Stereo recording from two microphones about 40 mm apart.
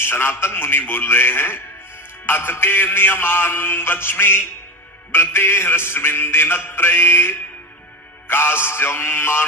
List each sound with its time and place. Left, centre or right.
0.0 s a man's voice: left
8.3 s music: left